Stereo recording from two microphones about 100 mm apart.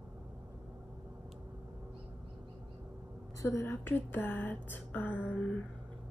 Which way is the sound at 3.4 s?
25° left (ahead or behind).